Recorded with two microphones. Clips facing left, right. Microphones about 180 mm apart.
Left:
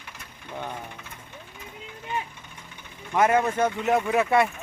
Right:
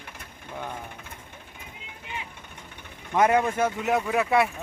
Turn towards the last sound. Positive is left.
turn(degrees=0)  # may be behind; listen again after turning